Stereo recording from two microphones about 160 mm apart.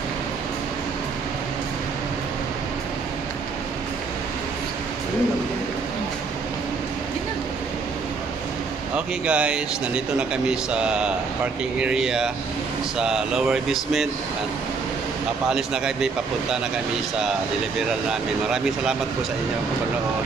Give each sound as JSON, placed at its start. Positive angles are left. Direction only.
{"t": 8.9, "sound": "speech", "side_deg": -5}
{"t": 15.5, "sound": "speech", "side_deg": -5}